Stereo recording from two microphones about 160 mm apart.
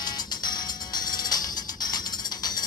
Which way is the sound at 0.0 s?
25° left (ahead or behind).